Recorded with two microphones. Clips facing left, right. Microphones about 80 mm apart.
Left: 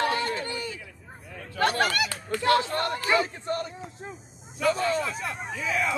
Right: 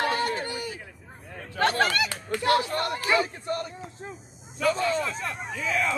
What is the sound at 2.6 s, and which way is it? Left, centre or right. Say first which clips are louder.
Speech: even; left.